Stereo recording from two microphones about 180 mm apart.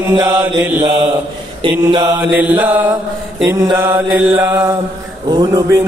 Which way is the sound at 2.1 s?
10° right (ahead or behind).